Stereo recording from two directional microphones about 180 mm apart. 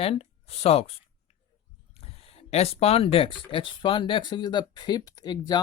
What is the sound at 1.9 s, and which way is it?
Speech, 35° left (ahead or behind).